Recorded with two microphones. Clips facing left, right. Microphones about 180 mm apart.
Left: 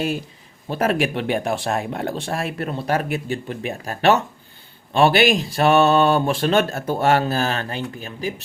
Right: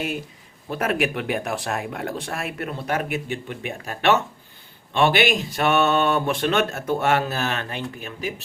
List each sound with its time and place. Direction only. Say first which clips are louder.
0.7 s speech: left 3 dB; 30° left (ahead or behind)